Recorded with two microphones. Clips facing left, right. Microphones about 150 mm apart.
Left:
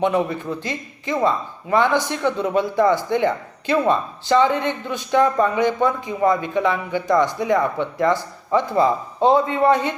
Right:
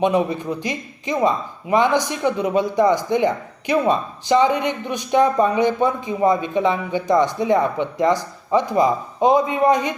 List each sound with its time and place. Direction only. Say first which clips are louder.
0.0 s speech: right 1 dB; 15° right (ahead or behind)